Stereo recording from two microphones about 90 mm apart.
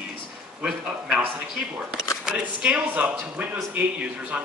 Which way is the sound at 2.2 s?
10° right (ahead or behind).